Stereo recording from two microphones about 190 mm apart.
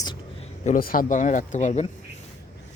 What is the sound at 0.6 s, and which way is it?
Speech, 45° left (ahead or behind).